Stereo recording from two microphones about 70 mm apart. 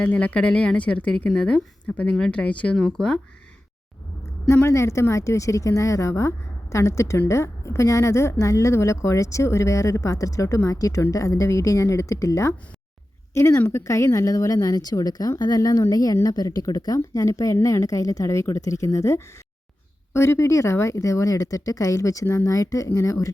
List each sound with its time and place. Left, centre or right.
0.0 s a woman's voice: left
4.4 s a woman's voice: left